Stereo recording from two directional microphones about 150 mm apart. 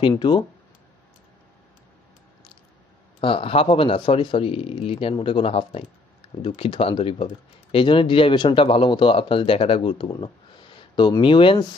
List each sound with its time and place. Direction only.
0.2 s speech: 30° left (ahead or behind)
3.2 s speech: 35° left (ahead or behind)